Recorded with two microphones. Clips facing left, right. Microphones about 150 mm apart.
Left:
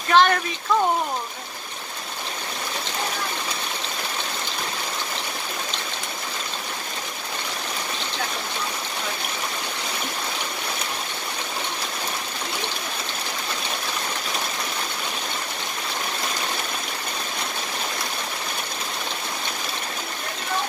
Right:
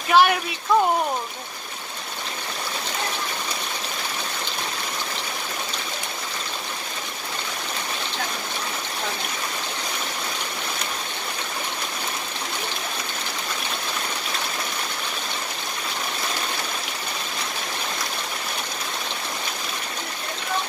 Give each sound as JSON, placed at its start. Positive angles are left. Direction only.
{"t": 0.1, "sound": "speech", "side_deg": -10}